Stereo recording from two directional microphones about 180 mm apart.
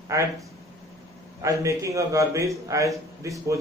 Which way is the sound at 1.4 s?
15° right (ahead or behind).